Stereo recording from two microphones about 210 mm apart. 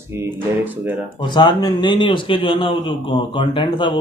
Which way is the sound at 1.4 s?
20° left (ahead or behind).